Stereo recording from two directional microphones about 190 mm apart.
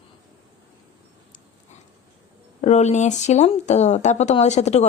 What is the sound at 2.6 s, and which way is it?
A woman's voice, 35° left (ahead or behind).